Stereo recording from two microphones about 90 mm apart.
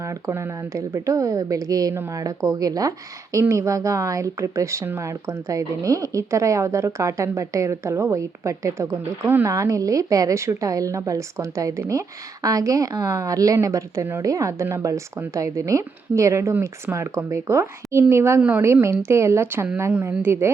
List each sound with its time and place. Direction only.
0.0 s a woman's voice: 35° right (ahead or behind)